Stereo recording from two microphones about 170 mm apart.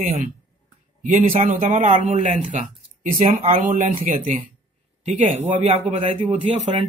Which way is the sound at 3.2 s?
35° right (ahead or behind).